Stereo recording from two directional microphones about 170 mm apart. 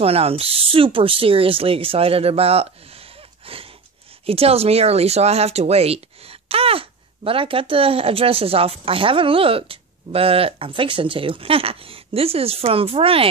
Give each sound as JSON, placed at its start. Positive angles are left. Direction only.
{"t": 0.0, "sound": "speech", "side_deg": -35}